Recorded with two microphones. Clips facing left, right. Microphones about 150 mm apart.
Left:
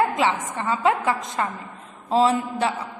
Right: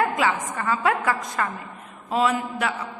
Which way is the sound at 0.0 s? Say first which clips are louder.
Left 1 dB; 25° left (ahead or behind).